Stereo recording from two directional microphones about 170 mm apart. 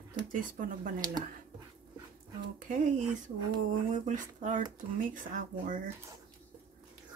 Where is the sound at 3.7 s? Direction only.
50° right (ahead or behind).